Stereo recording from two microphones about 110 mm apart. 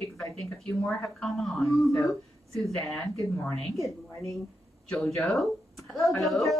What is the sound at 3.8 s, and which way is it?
Speech, 30° left (ahead or behind).